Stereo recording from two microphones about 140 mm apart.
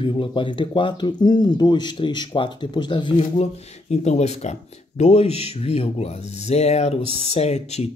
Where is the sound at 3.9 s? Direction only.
50° left (ahead or behind).